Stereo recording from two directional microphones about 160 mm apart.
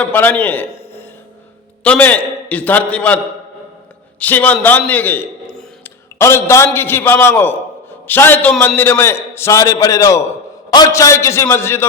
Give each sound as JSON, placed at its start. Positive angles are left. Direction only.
{"t": 0.0, "sound": "a man's voice", "side_deg": 10}
{"t": 1.8, "sound": "a man's voice", "side_deg": 10}
{"t": 4.2, "sound": "a man's voice", "side_deg": 10}
{"t": 4.9, "sound": "a sound", "side_deg": 10}
{"t": 6.1, "sound": "a man's voice", "side_deg": 15}